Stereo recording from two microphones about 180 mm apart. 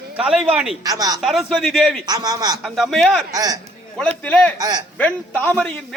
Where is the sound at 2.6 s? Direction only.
Centre (ahead or behind).